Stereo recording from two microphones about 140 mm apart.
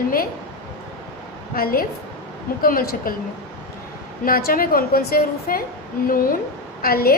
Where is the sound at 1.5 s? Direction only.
90° left.